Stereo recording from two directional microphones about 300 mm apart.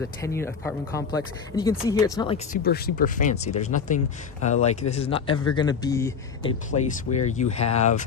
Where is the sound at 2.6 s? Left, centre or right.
Left.